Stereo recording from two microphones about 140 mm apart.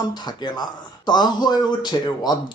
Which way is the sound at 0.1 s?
30° left (ahead or behind).